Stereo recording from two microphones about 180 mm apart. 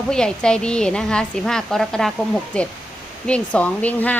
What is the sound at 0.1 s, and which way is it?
A woman's voice, 5° left (ahead or behind).